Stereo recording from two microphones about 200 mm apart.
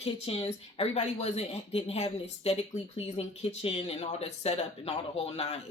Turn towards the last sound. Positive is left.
turn(degrees=30)  # may be behind; listen again after turning